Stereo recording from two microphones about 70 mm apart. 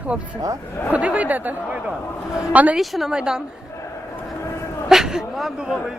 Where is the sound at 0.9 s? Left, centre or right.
Right.